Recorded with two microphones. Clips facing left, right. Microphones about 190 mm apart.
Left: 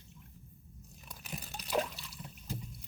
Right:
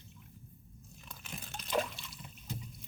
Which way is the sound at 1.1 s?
10° left (ahead or behind).